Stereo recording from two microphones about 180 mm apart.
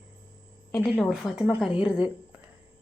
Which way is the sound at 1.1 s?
5° right (ahead or behind).